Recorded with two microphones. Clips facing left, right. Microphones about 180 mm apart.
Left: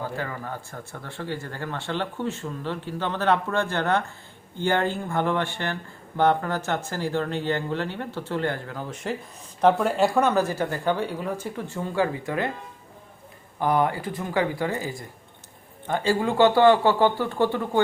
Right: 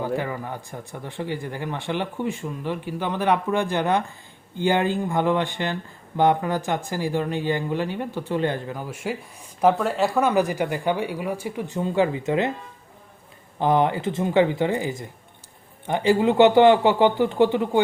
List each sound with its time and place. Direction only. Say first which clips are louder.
0.0 s speech: right 5 dB; 15° right (ahead or behind)
13.6 s speech: right 3 dB; 20° right (ahead or behind)